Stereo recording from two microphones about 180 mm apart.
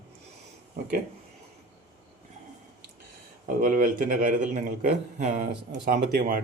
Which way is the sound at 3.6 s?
50° right (ahead or behind).